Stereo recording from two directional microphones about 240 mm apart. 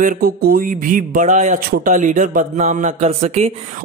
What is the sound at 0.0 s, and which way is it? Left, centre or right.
Speech, right.